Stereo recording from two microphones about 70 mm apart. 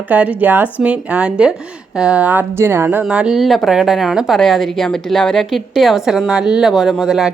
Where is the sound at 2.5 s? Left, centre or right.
Right.